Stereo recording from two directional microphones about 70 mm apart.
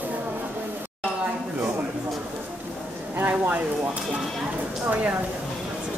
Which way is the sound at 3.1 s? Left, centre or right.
Right.